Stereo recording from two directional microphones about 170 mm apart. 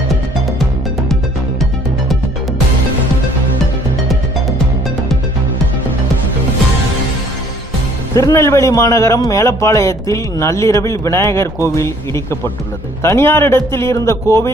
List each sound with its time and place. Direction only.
8.1 s a man's voice: 20° left (ahead or behind)